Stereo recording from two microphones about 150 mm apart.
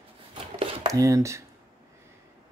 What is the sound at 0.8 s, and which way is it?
Speech, 20° right (ahead or behind).